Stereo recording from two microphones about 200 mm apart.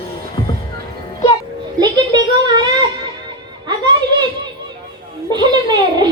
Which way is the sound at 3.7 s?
20° right (ahead or behind).